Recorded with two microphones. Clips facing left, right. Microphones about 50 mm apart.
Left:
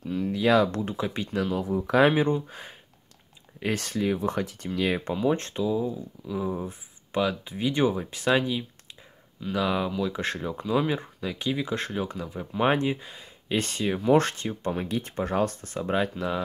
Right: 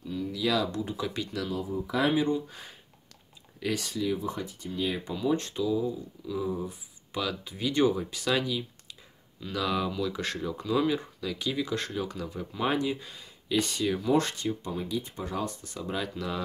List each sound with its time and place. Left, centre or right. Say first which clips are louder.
0.0 s a sound: left 5 dB; left
0.9 s speech: left 4 dB; left
1.5 s speech: left 8 dB; left
2.4 s speech: left 3 dB; left
3.7 s speech: left 3 dB; left
4.3 s speech: left 6 dB; left
5.1 s speech: left 3 dB; left
12.5 s speech: left 5 dB; left